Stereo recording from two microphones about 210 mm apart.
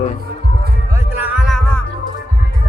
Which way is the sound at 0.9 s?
10° right (ahead or behind).